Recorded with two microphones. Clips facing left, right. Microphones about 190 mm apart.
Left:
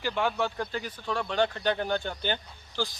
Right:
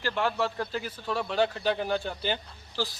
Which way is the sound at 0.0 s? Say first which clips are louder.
Even; centre (ahead or behind).